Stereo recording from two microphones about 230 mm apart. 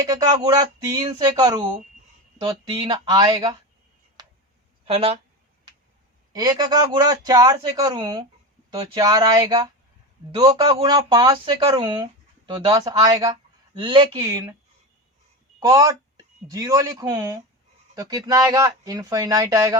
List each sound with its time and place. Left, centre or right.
0.0 s speech: centre
4.9 s speech: right
6.3 s speech: centre
15.6 s speech: centre